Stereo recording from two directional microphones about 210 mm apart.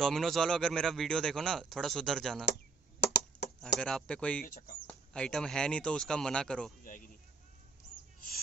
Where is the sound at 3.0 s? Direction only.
55° left (ahead or behind).